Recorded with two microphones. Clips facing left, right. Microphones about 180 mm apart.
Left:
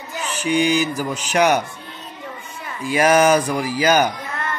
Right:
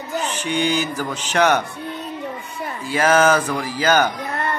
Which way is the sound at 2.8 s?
15° left (ahead or behind).